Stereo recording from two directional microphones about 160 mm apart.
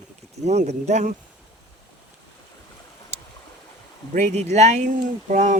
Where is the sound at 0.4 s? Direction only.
45° right (ahead or behind).